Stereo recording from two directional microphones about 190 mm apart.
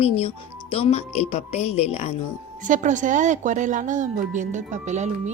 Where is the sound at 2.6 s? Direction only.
40° right (ahead or behind).